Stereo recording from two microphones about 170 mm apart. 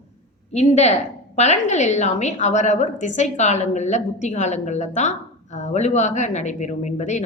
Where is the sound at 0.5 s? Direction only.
40° left (ahead or behind).